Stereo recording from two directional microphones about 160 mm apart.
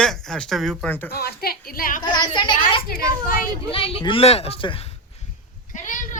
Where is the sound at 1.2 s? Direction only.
75° left (ahead or behind); by 2.0 s 60° left (ahead or behind).